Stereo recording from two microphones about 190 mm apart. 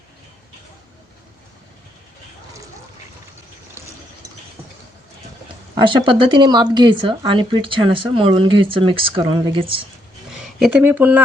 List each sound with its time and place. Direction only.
5.7 s speech: 25° right (ahead or behind)
10.6 s speech: 5° right (ahead or behind)